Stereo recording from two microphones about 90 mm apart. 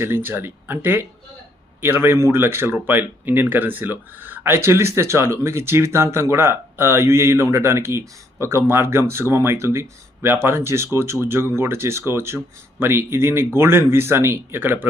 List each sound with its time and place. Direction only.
0.0 s speech: 25° right (ahead or behind)